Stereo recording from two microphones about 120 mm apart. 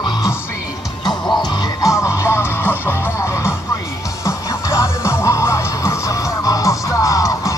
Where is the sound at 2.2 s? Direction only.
20° left (ahead or behind).